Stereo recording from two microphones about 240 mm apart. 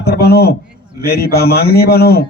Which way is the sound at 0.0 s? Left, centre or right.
Left.